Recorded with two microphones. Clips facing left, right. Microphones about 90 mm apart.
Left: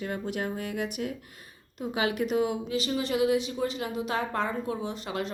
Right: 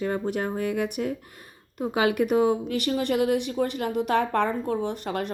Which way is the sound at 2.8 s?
60° right (ahead or behind).